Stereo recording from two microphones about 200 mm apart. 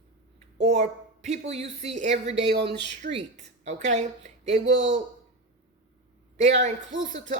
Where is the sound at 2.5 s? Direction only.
55° right (ahead or behind).